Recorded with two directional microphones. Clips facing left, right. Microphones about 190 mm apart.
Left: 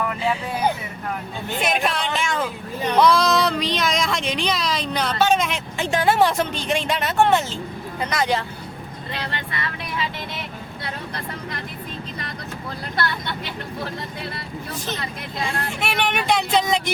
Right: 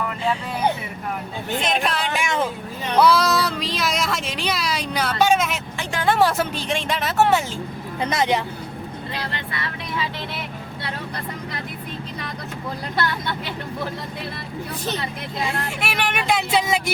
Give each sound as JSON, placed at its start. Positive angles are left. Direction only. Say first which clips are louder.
{"t": 1.6, "sound": "speech", "louder": "left 1 dB", "side_deg": 0}
{"t": 2.1, "sound": "vehicle", "louder": "right 1 dB", "side_deg": -15}
{"t": 3.0, "sound": "speech", "louder": "even", "side_deg": -5}
{"t": 5.8, "sound": "speech", "louder": "left 7 dB", "side_deg": 20}
{"t": 6.1, "sound": "speech", "louder": "right 1 dB", "side_deg": 0}
{"t": 8.1, "sound": "speech", "louder": "right 1 dB", "side_deg": -20}
{"t": 15.8, "sound": "speech", "louder": "left 3 dB", "side_deg": -5}